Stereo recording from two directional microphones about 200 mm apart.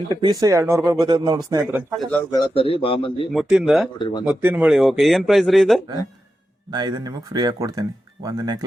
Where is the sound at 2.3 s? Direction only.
30° left (ahead or behind).